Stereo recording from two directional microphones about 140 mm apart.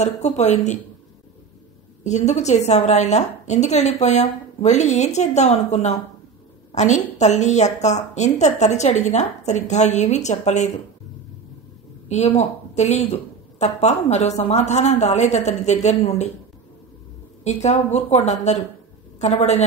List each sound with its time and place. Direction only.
0.0 s a woman's voice: 55° left (ahead or behind)
2.0 s a woman's voice: 55° left (ahead or behind)
12.1 s a woman's voice: 50° left (ahead or behind)
17.4 s a woman's voice: 55° left (ahead or behind)